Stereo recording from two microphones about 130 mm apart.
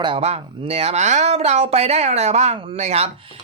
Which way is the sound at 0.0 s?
45° right (ahead or behind).